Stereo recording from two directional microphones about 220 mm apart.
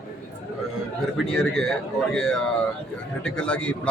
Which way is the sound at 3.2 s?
5° left (ahead or behind).